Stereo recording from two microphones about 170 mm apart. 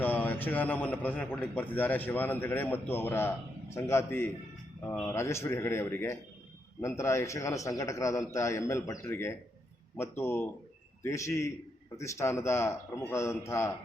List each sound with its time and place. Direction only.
0.0 s a man's voice: 10° left (ahead or behind)